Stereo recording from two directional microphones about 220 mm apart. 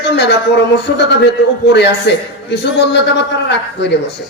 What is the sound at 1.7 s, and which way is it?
A man's voice, 50° left (ahead or behind).